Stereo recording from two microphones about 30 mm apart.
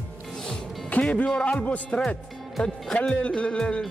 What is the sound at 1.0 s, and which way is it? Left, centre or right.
Speech, left.